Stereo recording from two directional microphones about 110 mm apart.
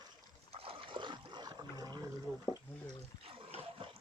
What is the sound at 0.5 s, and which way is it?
Dog, 55° right (ahead or behind).